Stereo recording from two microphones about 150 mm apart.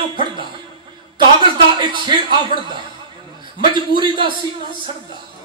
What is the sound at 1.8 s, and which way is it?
Speech, 30° right (ahead or behind).